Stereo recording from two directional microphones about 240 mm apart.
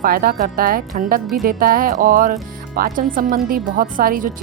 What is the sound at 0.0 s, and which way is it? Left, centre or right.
Speech, right.